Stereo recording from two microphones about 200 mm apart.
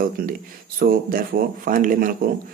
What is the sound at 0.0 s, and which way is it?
Speech, 45° right (ahead or behind).